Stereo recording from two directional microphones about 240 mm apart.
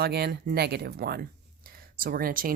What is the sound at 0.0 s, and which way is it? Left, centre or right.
Speech, right.